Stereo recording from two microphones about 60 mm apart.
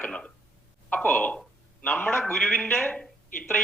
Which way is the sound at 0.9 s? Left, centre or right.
Left.